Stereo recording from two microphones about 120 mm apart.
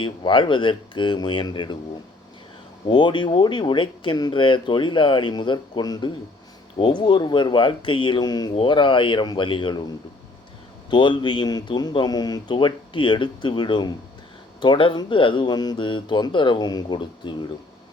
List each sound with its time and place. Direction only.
0.0 s speech: 45° left (ahead or behind)
2.8 s speech: 40° left (ahead or behind)
10.8 s speech: 40° left (ahead or behind)